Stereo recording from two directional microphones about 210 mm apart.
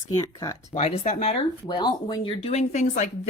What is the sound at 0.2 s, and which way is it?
Speech, 15° left (ahead or behind).